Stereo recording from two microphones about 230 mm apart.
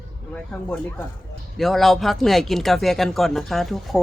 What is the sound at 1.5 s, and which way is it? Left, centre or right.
Speech, centre.